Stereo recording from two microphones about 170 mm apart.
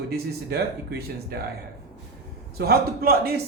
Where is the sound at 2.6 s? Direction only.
65° right (ahead or behind).